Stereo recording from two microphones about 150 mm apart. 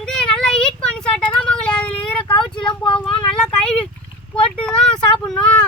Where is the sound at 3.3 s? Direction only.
5° left (ahead or behind).